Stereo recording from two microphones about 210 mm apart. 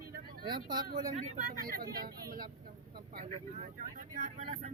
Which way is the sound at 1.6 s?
45° right (ahead or behind).